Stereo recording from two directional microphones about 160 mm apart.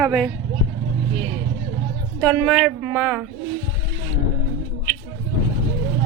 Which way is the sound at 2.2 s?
Centre (ahead or behind).